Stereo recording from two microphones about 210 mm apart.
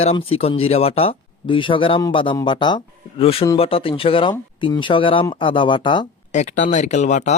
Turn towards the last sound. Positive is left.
turn(degrees=35)  # may be behind; listen again after turning